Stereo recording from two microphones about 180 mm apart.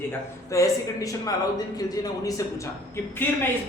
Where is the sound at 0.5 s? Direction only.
20° left (ahead or behind).